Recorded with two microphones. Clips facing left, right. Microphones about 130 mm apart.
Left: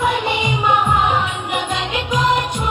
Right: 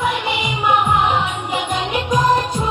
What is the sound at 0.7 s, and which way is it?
Music, 10° right (ahead or behind).